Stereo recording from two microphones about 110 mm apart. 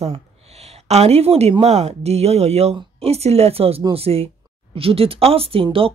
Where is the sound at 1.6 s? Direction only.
80° right.